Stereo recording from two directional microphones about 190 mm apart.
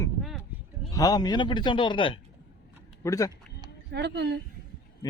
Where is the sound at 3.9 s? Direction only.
60° right (ahead or behind).